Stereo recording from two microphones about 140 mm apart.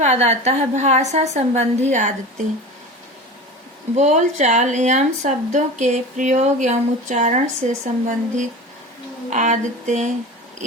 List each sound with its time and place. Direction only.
0.0 s a woman's voice: 50° right (ahead or behind)
3.9 s speech: 60° right (ahead or behind)